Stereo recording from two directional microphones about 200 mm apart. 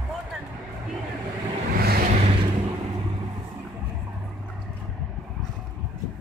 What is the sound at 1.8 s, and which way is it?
Vehicle, 50° right (ahead or behind).